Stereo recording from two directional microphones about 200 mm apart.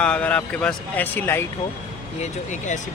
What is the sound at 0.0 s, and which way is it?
Speech, 5° left (ahead or behind).